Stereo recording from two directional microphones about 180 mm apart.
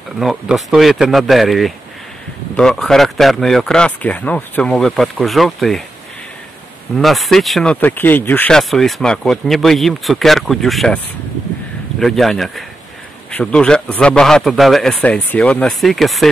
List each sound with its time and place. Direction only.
0.2 s speech: centre (ahead or behind)
7.0 s speech: centre (ahead or behind)
12.0 s speech: centre (ahead or behind)